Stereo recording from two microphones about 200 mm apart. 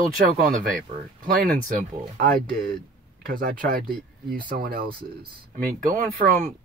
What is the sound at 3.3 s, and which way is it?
Speech, 45° right (ahead or behind).